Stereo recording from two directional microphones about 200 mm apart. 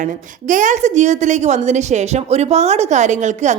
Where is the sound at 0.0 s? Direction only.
40° right (ahead or behind).